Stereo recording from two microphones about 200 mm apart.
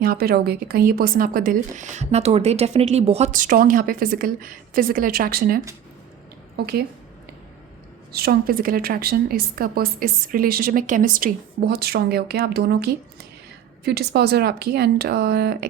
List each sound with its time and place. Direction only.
0.0 s speech: 50° right (ahead or behind)
8.1 s speech: 50° right (ahead or behind)